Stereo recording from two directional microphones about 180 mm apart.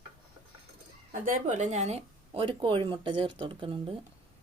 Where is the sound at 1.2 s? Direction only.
45° right (ahead or behind); by 3.8 s 30° right (ahead or behind).